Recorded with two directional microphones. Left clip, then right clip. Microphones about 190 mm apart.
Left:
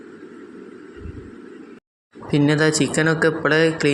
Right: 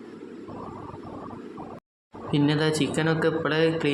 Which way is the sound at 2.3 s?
25° left (ahead or behind).